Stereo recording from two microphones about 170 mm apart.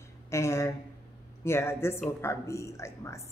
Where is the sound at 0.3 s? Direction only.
15° left (ahead or behind).